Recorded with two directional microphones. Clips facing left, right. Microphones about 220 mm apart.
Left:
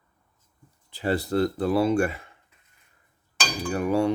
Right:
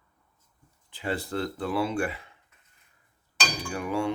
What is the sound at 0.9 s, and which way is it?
Speech, 40° left (ahead or behind).